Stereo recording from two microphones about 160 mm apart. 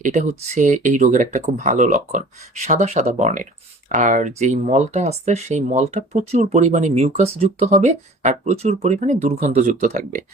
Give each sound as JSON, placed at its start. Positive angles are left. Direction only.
{"t": 0.0, "sound": "speech", "side_deg": -50}